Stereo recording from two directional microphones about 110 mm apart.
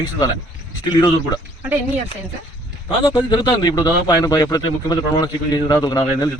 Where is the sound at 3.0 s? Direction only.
45° left (ahead or behind).